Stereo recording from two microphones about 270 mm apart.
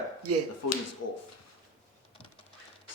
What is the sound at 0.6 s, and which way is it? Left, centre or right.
Speech, left.